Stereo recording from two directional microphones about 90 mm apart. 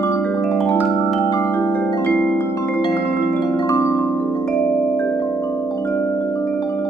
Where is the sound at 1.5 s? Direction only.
20° left (ahead or behind).